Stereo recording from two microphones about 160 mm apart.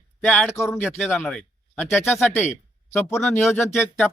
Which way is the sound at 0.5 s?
15° left (ahead or behind).